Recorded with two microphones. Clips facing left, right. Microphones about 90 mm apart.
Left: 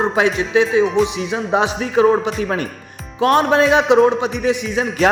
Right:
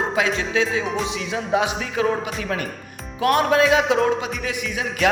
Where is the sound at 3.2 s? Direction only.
30° left (ahead or behind).